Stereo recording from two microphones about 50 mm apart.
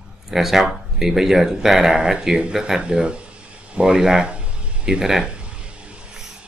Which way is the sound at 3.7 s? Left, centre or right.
Centre.